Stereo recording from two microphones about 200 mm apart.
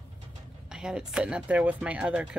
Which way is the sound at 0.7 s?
5° right (ahead or behind).